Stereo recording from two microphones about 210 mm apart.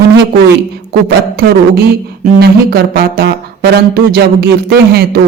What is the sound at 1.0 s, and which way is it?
Speech, 45° right (ahead or behind).